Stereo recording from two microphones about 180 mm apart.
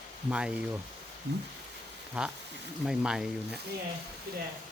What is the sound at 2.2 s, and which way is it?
Speech, 5° right (ahead or behind).